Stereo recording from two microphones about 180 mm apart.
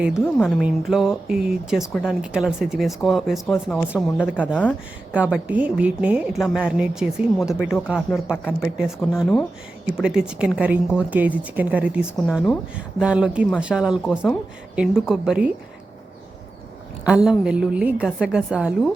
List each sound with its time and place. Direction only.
0.6 s a woman's voice: centre (ahead or behind)
4.3 s a woman's voice: 5° right (ahead or behind)
17.1 s a woman's voice: 5° right (ahead or behind)